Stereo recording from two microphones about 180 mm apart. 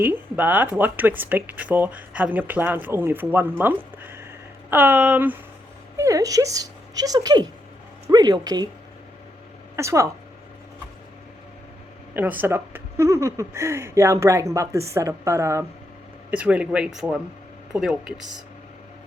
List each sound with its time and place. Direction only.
0.0 s speech: 10° right (ahead or behind)
3.6 s a sound: 10° right (ahead or behind)
4.7 s speech: 10° right (ahead or behind)
9.7 s speech: 15° right (ahead or behind)
12.1 s speech: 10° right (ahead or behind)